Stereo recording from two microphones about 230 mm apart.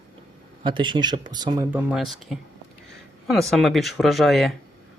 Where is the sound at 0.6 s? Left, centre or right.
Right.